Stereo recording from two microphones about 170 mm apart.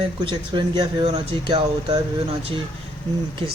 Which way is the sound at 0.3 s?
25° right (ahead or behind).